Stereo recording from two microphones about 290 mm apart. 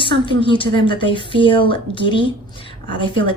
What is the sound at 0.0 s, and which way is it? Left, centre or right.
A woman's voice, centre.